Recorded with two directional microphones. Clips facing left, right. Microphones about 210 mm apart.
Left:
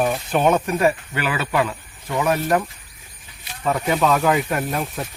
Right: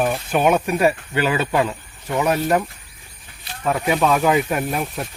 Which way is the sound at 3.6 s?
5° right (ahead or behind).